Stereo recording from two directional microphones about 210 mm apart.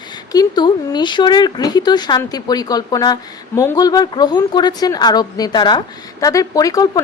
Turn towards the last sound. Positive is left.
turn(degrees=15)  # may be behind; listen again after turning